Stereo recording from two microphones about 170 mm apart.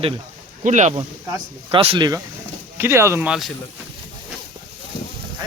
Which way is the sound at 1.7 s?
30° right (ahead or behind).